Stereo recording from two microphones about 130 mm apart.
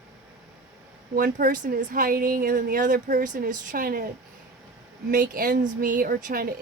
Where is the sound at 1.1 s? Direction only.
90° right.